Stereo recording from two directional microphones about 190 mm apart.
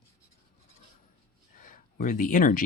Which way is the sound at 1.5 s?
45° left (ahead or behind).